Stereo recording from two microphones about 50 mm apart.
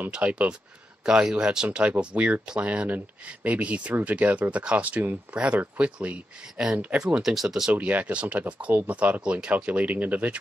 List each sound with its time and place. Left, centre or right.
0.1 s speech: right
7.2 s speech: centre
7.8 s speech: right
9.7 s speech: right